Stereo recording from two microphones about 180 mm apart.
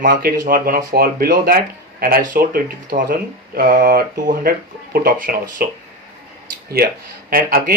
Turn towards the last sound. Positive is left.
turn(degrees=-55)  # may be behind; listen again after turning